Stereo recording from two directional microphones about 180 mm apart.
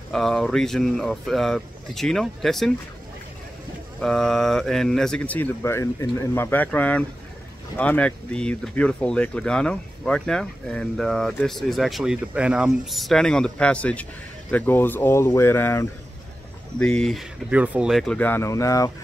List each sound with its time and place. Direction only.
0.1 s speech: centre (ahead or behind)
4.0 s speech: centre (ahead or behind); by 18.9 s 20° left (ahead or behind)